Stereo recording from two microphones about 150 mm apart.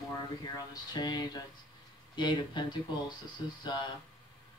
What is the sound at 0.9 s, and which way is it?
Speech, 25° left (ahead or behind).